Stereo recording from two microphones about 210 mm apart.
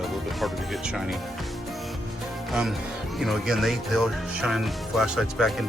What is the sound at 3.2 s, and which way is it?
Speech, centre (ahead or behind).